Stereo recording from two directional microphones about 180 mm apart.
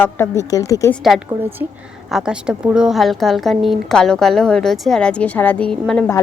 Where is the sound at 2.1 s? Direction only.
5° right (ahead or behind).